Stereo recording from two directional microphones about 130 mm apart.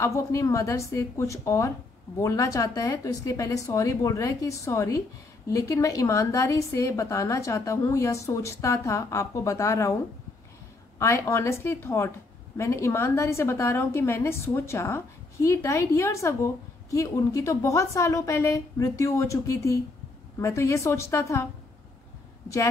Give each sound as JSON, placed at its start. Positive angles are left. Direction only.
{"t": 0.0, "sound": "a woman's voice", "side_deg": 25}
{"t": 11.0, "sound": "a woman's voice", "side_deg": 25}